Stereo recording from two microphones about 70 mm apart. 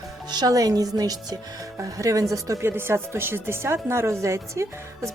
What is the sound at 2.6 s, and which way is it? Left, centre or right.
A woman's voice, right.